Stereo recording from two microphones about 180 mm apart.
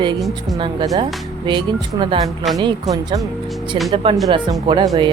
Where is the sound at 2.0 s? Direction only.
25° right (ahead or behind).